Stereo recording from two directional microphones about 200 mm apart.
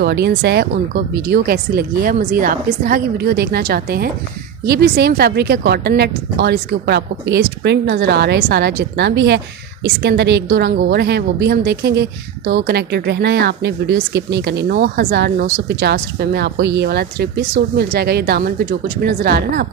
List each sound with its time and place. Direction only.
0.0 s a woman's voice: 55° right (ahead or behind)